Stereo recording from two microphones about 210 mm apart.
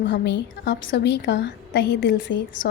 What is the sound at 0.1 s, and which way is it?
A woman's voice, 55° left (ahead or behind).